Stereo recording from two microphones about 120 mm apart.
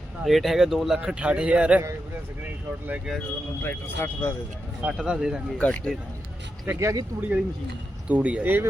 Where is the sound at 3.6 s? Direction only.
20° left (ahead or behind).